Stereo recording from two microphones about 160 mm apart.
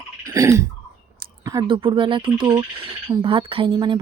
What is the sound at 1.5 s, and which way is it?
Speech, 25° right (ahead or behind).